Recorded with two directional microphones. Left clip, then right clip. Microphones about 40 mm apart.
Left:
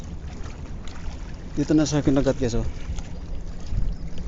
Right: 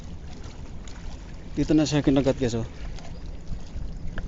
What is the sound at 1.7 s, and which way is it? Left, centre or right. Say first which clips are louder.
Speech: left 1 dB; right.